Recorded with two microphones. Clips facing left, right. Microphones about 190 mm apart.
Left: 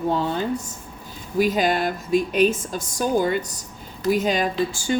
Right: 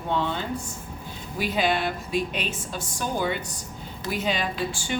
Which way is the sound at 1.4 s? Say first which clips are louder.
Left 5 dB; 45° left (ahead or behind).